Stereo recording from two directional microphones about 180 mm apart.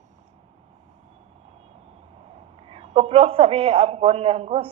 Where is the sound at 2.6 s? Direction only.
30° right (ahead or behind).